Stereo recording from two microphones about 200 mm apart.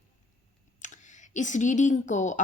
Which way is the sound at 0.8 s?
40° left (ahead or behind).